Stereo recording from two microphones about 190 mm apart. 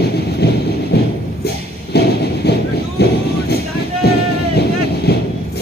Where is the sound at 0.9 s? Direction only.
60° left (ahead or behind).